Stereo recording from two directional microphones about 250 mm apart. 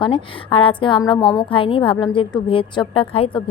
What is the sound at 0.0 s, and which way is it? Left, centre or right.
A woman's voice, left.